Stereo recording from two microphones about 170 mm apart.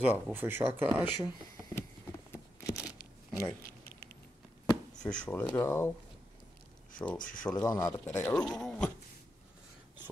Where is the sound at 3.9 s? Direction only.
70° left (ahead or behind).